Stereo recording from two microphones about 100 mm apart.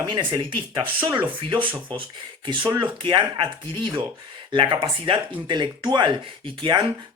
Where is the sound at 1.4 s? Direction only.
60° right (ahead or behind).